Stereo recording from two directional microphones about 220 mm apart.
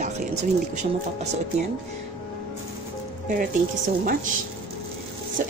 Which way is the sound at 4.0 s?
35° right (ahead or behind).